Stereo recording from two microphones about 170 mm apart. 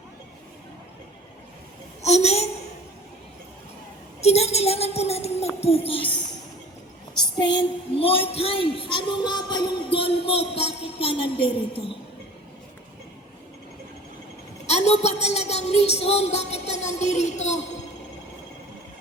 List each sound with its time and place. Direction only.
2.0 s a woman's voice: 40° left (ahead or behind)
4.2 s a woman's voice: 40° left (ahead or behind)
7.3 s a woman's voice: 25° left (ahead or behind)
15.0 s a woman's voice: 40° left (ahead or behind)